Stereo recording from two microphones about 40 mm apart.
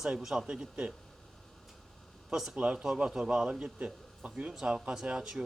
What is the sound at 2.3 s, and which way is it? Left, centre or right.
A man's voice, centre.